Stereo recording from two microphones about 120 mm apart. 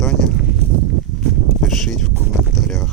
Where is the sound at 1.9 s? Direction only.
5° left (ahead or behind).